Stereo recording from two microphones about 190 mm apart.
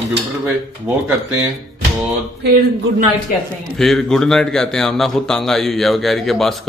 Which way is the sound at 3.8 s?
Centre (ahead or behind).